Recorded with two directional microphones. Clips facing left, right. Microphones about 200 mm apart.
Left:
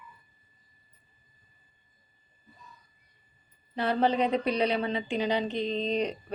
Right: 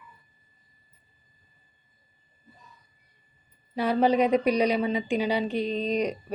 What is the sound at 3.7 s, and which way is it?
A woman's voice, 10° right (ahead or behind).